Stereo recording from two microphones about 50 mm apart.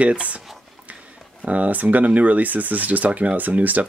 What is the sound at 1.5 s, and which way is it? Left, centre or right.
Speech, right.